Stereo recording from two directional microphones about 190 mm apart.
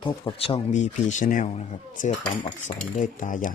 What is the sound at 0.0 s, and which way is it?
Speech, 30° left (ahead or behind).